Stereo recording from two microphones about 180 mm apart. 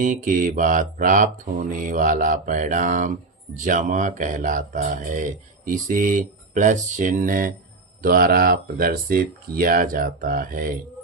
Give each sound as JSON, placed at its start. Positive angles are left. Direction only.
{"t": 0.0, "sound": "speech", "side_deg": -45}